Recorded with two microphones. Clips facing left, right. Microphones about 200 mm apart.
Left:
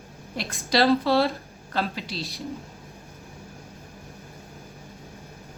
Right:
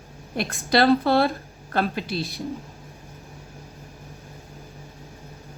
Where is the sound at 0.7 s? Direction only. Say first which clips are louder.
Right 2 dB; 55° right (ahead or behind).